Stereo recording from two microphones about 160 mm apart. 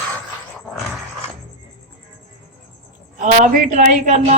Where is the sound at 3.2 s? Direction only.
55° right (ahead or behind).